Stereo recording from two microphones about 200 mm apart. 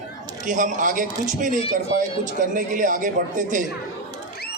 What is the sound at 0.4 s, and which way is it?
A man's voice, 40° right (ahead or behind).